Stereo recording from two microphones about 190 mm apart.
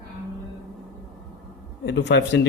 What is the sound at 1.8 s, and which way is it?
Speech, 65° left (ahead or behind).